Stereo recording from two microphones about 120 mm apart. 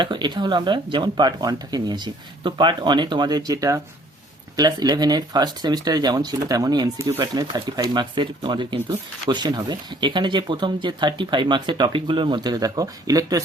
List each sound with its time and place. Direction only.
0.0 s speech: 40° right (ahead or behind)